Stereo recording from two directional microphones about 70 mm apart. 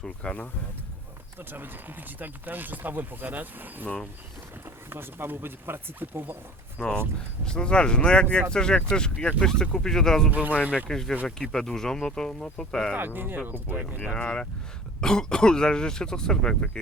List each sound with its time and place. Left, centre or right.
0.0 s speech: centre
1.4 s speech: right
4.9 s speech: right
6.8 s speech: centre
12.9 s speech: right
14.0 s speech: centre